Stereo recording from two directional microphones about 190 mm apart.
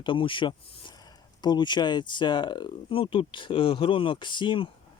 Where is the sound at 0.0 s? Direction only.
25° left (ahead or behind).